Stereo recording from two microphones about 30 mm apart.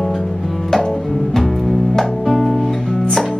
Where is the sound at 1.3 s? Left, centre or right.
Centre.